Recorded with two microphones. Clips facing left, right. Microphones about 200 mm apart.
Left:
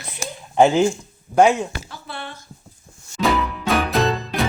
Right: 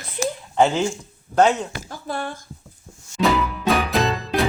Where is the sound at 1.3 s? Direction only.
10° left (ahead or behind).